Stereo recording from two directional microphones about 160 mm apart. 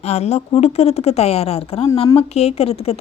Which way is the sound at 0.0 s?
40° left (ahead or behind).